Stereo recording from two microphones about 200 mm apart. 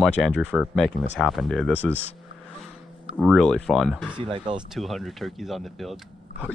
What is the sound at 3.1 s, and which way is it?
Speech, centre (ahead or behind).